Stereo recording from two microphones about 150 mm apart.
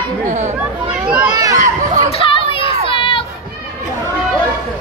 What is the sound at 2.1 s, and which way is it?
Children playing, 35° left (ahead or behind).